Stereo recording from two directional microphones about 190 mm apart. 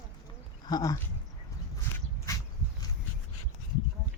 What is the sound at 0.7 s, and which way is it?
Speech, 20° left (ahead or behind).